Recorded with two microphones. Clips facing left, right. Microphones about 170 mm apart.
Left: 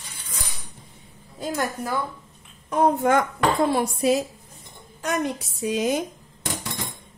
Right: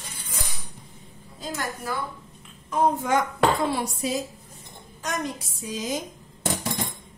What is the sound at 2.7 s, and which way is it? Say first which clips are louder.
A woman's voice: left 3 dB; 60° left (ahead or behind).